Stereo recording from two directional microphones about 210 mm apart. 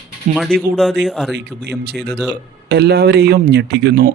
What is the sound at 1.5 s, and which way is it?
Speech, 50° right (ahead or behind).